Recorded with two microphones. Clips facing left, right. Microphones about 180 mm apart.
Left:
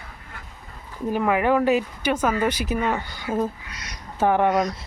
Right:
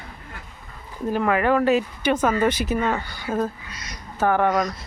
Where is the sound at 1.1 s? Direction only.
15° left (ahead or behind).